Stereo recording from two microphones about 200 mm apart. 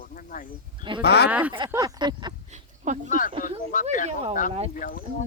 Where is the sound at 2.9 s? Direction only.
40° right (ahead or behind).